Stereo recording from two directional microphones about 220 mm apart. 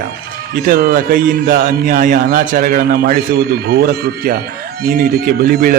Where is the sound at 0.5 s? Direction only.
40° right (ahead or behind).